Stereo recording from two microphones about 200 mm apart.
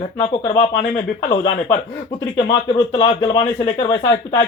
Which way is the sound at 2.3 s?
25° left (ahead or behind).